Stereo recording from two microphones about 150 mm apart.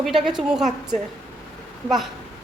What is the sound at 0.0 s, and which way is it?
Speech, centre (ahead or behind).